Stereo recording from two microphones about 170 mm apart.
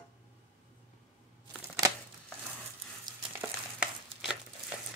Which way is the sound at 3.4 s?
5° right (ahead or behind).